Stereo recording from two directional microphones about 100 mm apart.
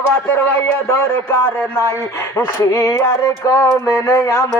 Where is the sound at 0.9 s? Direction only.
25° left (ahead or behind).